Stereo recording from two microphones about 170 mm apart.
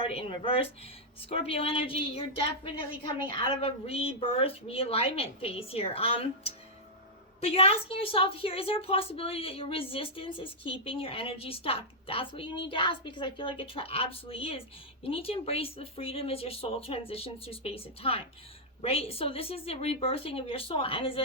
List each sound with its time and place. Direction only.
0.0 s a woman's voice: 35° left (ahead or behind)